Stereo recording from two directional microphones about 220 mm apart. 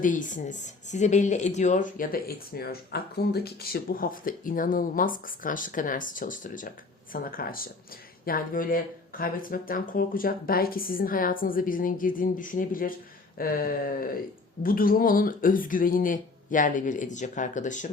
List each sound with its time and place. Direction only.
0.0 s speech: 35° left (ahead or behind)